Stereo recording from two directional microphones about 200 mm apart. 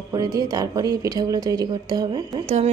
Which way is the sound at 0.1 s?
20° right (ahead or behind).